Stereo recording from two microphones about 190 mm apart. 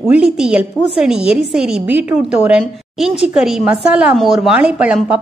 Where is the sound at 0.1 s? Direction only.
5° right (ahead or behind).